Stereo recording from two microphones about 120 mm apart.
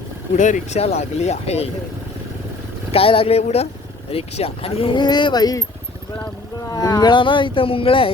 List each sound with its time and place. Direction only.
0.3 s speech: 90° left; by 1.7 s 60° left (ahead or behind)
2.9 s speech: 50° left (ahead or behind); by 5.6 s 35° left (ahead or behind)
6.7 s speech: 30° left (ahead or behind)